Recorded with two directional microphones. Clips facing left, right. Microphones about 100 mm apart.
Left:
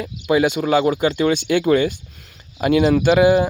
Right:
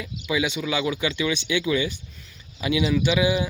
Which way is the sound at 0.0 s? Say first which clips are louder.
Left 8 dB; 50° left (ahead or behind).